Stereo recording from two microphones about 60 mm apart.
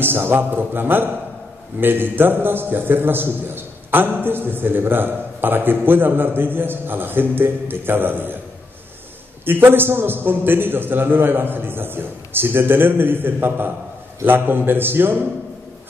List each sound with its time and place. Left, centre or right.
0.0 s a man's voice: right
9.4 s a man's voice: right